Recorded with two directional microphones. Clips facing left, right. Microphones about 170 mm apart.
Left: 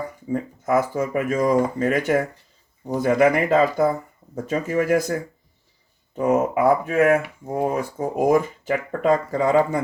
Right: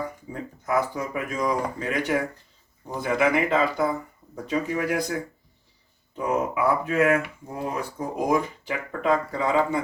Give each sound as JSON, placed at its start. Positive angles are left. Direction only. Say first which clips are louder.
{"t": 0.6, "sound": "speech", "louder": "left 3 dB", "side_deg": 50}
{"t": 6.1, "sound": "speech", "louder": "left 6 dB", "side_deg": 50}